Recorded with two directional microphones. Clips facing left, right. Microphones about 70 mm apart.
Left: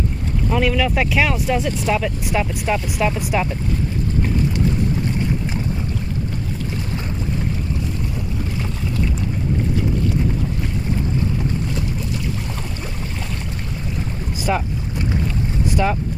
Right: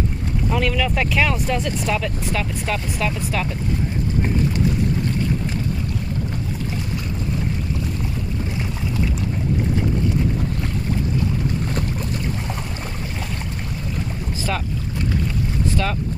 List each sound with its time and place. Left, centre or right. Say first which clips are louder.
0.5 s speech: left 3 dB; centre
14.5 s speech: left 5 dB; centre
15.7 s speech: left 6 dB; centre